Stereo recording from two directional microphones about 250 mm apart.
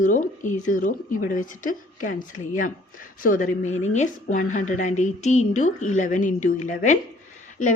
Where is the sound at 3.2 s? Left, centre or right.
Left.